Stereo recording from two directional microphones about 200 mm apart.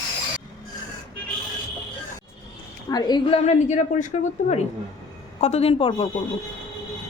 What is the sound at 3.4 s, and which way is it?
A woman's voice, 35° left (ahead or behind).